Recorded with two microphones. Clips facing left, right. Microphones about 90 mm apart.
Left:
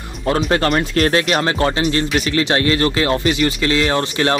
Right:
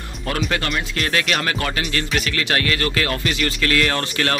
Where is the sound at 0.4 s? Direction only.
40° left (ahead or behind).